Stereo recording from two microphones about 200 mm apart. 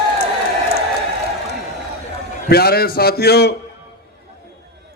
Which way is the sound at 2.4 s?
50° left (ahead or behind).